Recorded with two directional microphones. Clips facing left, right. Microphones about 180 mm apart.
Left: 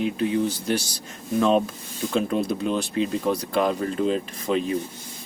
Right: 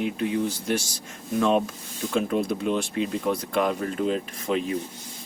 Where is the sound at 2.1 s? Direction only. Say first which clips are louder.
Left 1 dB; 30° left (ahead or behind).